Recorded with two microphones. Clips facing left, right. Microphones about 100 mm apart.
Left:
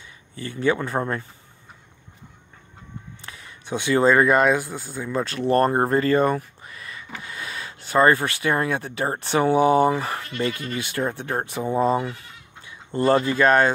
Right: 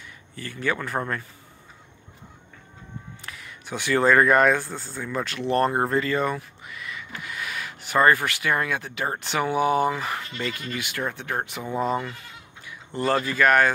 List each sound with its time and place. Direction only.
0.4 s speech: 20° left (ahead or behind)
3.3 s speech: 30° left (ahead or behind)
5.1 s speech: 35° left (ahead or behind)